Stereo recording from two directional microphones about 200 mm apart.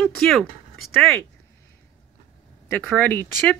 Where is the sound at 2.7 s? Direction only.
5° left (ahead or behind).